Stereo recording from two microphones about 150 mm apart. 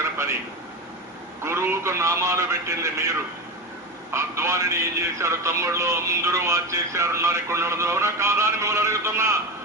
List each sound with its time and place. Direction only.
1.5 s a man's voice: 15° right (ahead or behind)
4.1 s a man's voice: 20° right (ahead or behind)